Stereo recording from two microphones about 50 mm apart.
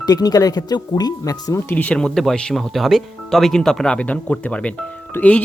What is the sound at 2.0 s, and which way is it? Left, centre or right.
Speech, centre.